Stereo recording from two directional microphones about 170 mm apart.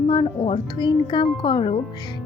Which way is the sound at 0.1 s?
30° left (ahead or behind).